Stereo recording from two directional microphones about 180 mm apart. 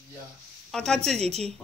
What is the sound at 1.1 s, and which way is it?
Speech, 35° right (ahead or behind).